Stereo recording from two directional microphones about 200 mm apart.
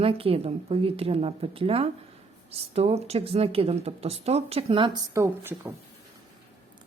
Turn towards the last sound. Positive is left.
turn(degrees=-10)  # may be behind; listen again after turning